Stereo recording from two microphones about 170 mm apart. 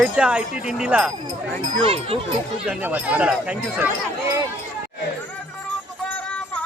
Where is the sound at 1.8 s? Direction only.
35° right (ahead or behind).